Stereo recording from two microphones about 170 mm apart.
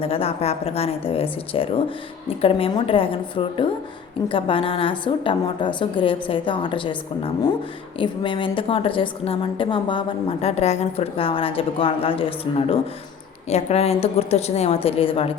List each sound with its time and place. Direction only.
0.0 s a woman's voice: 35° left (ahead or behind)